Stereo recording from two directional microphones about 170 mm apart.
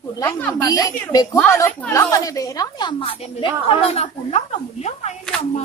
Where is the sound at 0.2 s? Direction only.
10° left (ahead or behind).